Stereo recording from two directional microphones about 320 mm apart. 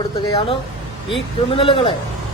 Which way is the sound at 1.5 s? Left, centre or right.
Centre.